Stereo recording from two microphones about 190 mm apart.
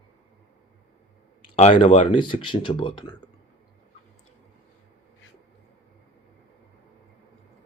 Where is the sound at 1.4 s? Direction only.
30° left (ahead or behind).